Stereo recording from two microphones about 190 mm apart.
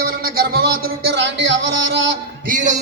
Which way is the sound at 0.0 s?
50° right (ahead or behind).